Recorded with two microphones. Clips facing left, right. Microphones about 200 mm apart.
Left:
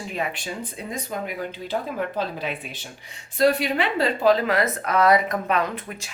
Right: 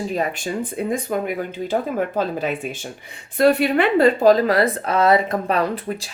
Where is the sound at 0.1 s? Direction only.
40° right (ahead or behind).